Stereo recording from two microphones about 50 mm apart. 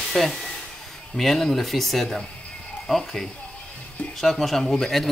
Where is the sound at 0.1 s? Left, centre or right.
Centre.